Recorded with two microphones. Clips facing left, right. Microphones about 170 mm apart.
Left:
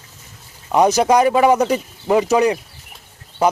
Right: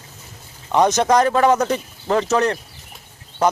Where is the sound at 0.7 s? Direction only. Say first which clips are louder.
Left 2 dB; 5° left (ahead or behind).